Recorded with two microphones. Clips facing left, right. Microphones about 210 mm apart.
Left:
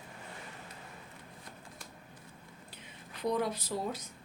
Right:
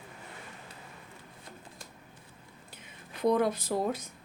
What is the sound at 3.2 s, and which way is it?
Speech, 50° right (ahead or behind).